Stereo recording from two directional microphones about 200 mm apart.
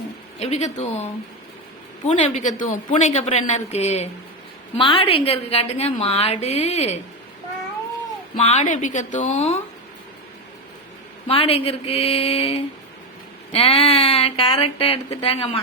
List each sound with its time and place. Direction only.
0.3 s a woman's voice: 30° left (ahead or behind)
2.0 s a woman's voice: 35° left (ahead or behind)
8.4 s a woman's voice: 35° left (ahead or behind)
11.3 s speech: 30° left (ahead or behind)